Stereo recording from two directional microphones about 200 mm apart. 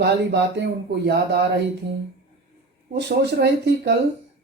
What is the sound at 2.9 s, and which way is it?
Speech, 60° right (ahead or behind).